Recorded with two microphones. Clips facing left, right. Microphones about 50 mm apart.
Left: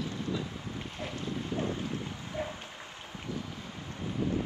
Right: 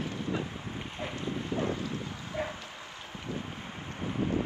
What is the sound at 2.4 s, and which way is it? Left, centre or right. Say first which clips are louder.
Dog: right 2 dB; right.